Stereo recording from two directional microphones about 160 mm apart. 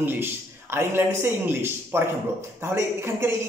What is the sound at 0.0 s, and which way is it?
A woman's voice, 15° right (ahead or behind).